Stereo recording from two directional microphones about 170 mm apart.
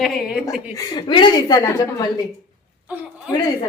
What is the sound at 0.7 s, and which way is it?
A woman's voice, 25° left (ahead or behind).